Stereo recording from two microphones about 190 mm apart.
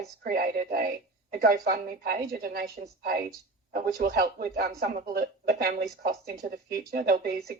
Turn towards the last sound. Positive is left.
turn(degrees=-50)  # may be behind; listen again after turning